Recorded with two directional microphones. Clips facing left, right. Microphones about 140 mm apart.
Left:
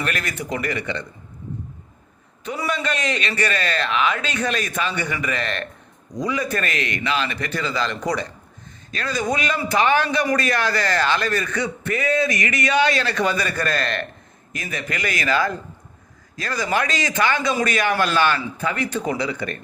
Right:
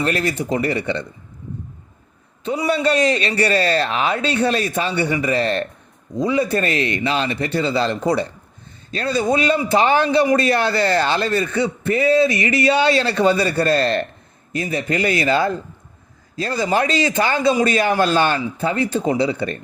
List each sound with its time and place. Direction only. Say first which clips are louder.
0.0 s a man's voice: right 6 dB; 30° right (ahead or behind)
2.4 s a man's voice: right 6 dB; 25° right (ahead or behind)